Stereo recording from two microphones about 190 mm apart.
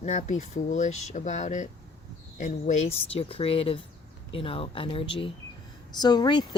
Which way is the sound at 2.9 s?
30° left (ahead or behind).